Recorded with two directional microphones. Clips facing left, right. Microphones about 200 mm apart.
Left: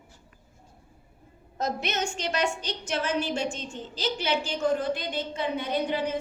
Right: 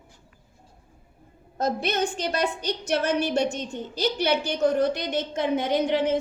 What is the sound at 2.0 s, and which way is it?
Speech, 55° right (ahead or behind).